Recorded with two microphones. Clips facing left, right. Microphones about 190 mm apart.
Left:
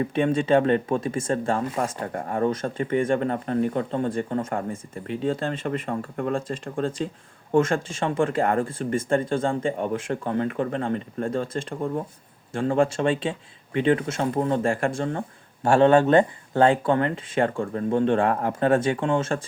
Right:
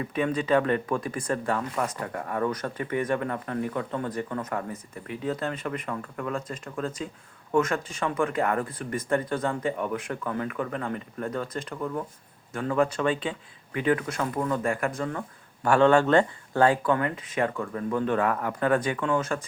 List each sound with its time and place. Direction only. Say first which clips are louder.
0.1 s speech: left 2 dB; 25° left (ahead or behind)